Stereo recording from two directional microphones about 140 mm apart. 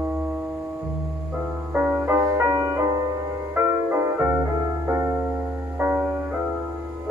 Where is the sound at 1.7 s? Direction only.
10° right (ahead or behind).